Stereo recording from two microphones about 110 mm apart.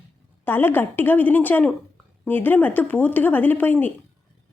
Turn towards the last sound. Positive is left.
turn(degrees=15)  # may be behind; listen again after turning